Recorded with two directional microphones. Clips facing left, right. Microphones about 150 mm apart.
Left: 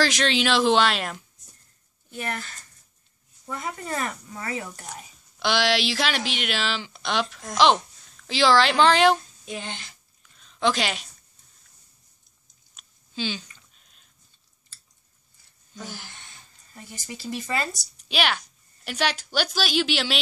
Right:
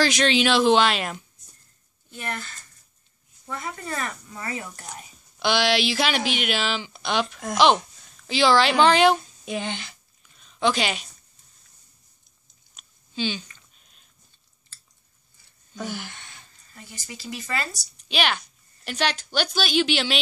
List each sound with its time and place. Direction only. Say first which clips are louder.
0.0 s speech: right 2 dB; centre (ahead or behind)
3.4 s speech: left 1 dB; 20° left (ahead or behind)
4.6 s speech: left 1 dB; 5° left (ahead or behind)
9.5 s speech: right 5 dB; 70° right (ahead or behind)
10.2 s a sound: right 1 dB; 5° right (ahead or behind)
12.7 s a sound: right 2 dB; centre (ahead or behind)
15.7 s speech: right 6 dB; 70° right (ahead or behind)
17.4 s speech: left 2 dB; 25° left (ahead or behind)
17.9 s a sound: right 1 dB; 5° left (ahead or behind)
18.9 s speech: even; 5° left (ahead or behind)